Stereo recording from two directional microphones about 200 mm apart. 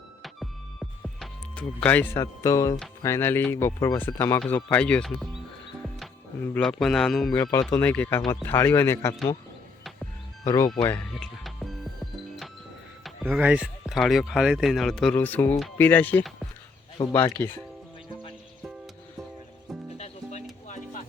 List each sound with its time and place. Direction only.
0.2 s music: centre (ahead or behind)
3.0 s a man's voice: 10° left (ahead or behind)
10.4 s speech: 15° left (ahead or behind)
10.8 s music: 5° left (ahead or behind)
13.2 s a man's voice: 5° right (ahead or behind); by 17.5 s 15° left (ahead or behind)
18.1 s horse: 25° left (ahead or behind)
20.0 s music: 35° left (ahead or behind)